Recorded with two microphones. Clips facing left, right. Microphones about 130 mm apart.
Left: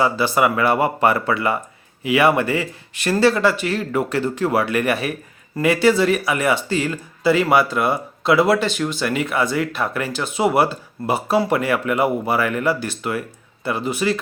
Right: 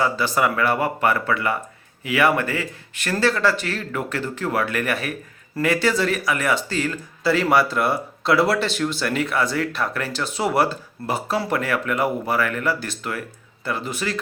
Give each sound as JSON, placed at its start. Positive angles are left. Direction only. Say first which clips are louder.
{"t": 0.3, "sound": "speech", "louder": "left 3 dB", "side_deg": 15}
{"t": 5.5, "sound": "speech", "louder": "left 4 dB", "side_deg": 10}
{"t": 7.6, "sound": "speech", "louder": "left 2 dB", "side_deg": 0}
{"t": 9.7, "sound": "speech", "louder": "left 2 dB", "side_deg": 15}
{"t": 10.5, "sound": "speech", "louder": "left 2 dB", "side_deg": 10}